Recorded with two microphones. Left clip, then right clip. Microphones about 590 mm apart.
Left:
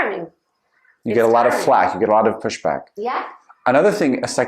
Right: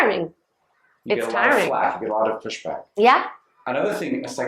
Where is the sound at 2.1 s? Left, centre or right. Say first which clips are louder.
Left 6 dB; left.